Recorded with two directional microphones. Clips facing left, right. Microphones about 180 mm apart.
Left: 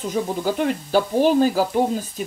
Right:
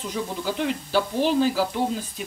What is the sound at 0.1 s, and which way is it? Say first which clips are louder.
Speech: left 6 dB; 45° left (ahead or behind).